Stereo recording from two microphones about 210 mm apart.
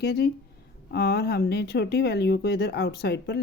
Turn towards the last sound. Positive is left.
turn(degrees=50)  # may be behind; listen again after turning